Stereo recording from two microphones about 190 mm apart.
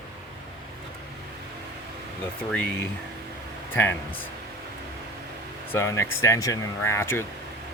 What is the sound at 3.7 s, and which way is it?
Speech, 10° left (ahead or behind).